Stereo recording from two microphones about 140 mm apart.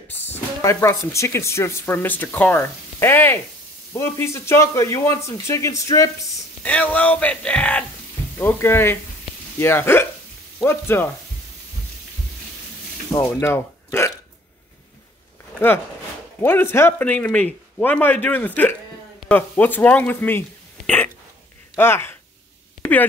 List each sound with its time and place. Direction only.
0.1 s a man's voice: 15° left (ahead or behind)
6.6 s speech: 10° left (ahead or behind)
13.1 s speech: 20° left (ahead or behind)
16.3 s speech: 15° left (ahead or behind)
20.8 s hiccup: 10° left (ahead or behind)
21.7 s speech: 15° left (ahead or behind)
22.8 s a sound: 10° left (ahead or behind)